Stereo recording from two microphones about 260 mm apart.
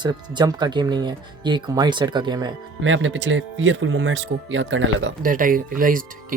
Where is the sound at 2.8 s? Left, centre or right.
Right.